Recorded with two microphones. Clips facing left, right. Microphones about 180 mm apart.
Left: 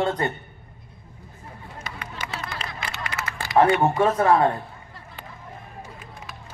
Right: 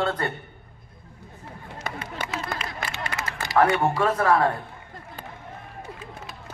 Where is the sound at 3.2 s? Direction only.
15° right (ahead or behind).